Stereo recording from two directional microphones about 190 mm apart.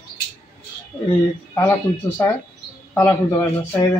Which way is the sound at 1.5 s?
15° left (ahead or behind).